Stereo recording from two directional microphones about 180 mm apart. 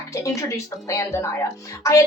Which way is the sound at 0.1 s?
15° left (ahead or behind).